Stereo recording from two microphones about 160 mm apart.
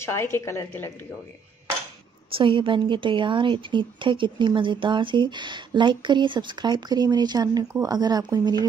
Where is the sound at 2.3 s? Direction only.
30° right (ahead or behind).